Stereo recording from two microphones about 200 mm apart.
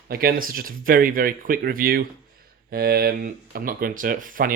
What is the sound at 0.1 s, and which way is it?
Speech, 45° right (ahead or behind).